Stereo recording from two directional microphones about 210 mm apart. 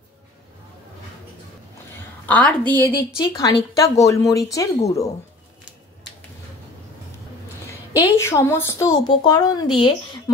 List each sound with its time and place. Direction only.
2.2 s a woman's voice: 5° left (ahead or behind)
8.0 s a woman's voice: 15° left (ahead or behind)